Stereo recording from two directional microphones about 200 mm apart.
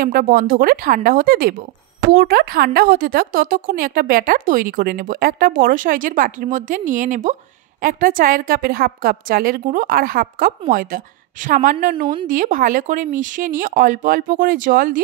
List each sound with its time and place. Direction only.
0.0 s a woman's voice: 45° right (ahead or behind)